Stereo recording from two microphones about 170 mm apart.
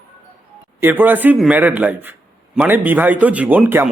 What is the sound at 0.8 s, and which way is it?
Speech, 10° right (ahead or behind).